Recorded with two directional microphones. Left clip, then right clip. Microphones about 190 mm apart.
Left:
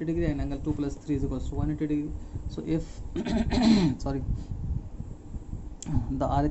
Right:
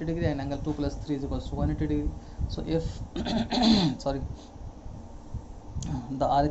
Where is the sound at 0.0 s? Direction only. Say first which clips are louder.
Even; 10° left (ahead or behind).